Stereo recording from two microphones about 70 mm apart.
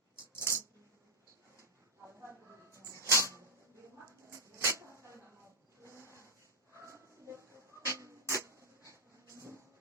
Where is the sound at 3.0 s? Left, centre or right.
Right.